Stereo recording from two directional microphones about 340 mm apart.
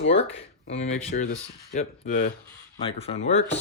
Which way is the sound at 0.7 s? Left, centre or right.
Centre.